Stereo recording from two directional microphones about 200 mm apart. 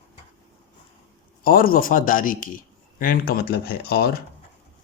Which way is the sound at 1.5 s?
45° left (ahead or behind).